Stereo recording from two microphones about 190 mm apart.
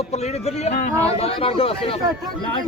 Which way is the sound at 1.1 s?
30° left (ahead or behind).